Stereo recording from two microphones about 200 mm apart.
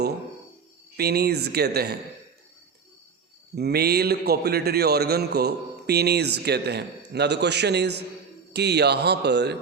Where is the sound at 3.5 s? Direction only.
50° right (ahead or behind).